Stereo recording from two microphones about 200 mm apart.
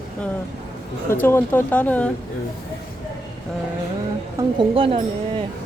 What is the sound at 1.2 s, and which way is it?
Speech, 10° left (ahead or behind).